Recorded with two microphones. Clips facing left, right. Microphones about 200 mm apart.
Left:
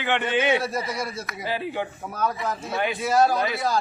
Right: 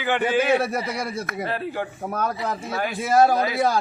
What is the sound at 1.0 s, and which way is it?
Speech, 60° right (ahead or behind).